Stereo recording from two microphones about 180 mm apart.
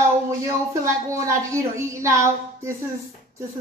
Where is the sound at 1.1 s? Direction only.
15° right (ahead or behind).